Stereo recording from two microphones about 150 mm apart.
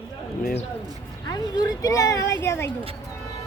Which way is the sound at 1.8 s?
20° left (ahead or behind).